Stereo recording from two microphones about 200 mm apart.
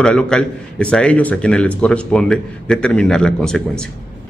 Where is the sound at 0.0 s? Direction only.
5° left (ahead or behind).